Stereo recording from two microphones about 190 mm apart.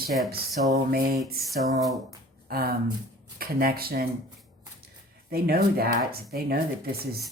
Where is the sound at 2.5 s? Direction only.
50° right (ahead or behind).